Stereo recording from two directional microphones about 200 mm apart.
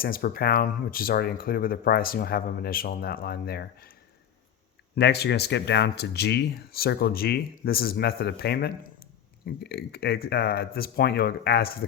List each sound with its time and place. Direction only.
0.0 s speech: 45° left (ahead or behind)
4.9 s speech: 55° left (ahead or behind)